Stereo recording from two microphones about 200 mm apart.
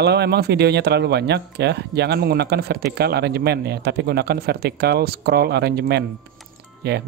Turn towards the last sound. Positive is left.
turn(degrees=-55)  # may be behind; listen again after turning